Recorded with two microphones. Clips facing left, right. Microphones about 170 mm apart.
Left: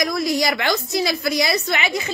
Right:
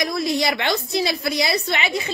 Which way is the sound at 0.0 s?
25° right (ahead or behind).